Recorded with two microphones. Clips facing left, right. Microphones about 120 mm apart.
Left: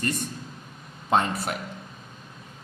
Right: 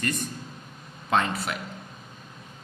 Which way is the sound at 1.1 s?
40° left (ahead or behind).